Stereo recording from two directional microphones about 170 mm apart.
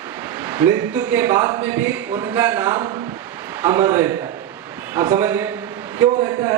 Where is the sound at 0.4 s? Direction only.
15° right (ahead or behind).